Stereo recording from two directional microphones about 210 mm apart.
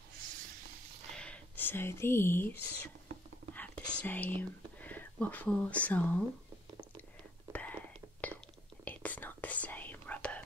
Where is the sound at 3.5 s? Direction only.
5° left (ahead or behind).